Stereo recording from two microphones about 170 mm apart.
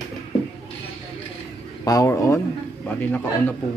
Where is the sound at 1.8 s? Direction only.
20° left (ahead or behind).